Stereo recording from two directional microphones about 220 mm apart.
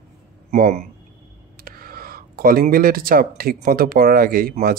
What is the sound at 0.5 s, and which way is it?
Speech, 35° right (ahead or behind).